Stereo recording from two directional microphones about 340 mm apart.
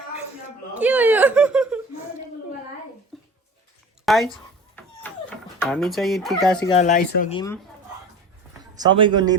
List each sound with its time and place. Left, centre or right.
0.8 s chuckle: centre
3.1 s bathtub: centre
4.0 s speech: centre
4.3 s a sound: centre
5.5 s speech: centre
6.7 s speech: left
8.8 s speech: centre